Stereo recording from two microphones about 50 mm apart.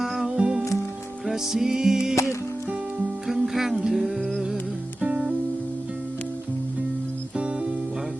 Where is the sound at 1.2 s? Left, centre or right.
Centre.